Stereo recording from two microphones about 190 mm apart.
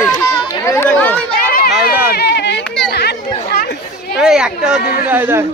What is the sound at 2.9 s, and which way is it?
Chatter, 60° left (ahead or behind).